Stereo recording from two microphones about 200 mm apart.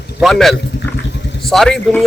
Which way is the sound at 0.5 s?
55° left (ahead or behind).